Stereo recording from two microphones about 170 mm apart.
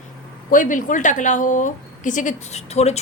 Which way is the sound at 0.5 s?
50° left (ahead or behind).